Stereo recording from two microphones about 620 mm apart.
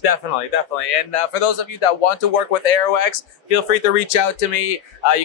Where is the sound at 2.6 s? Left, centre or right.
Left.